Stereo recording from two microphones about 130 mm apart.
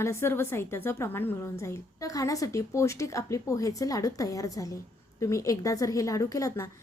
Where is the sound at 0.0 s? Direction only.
20° left (ahead or behind).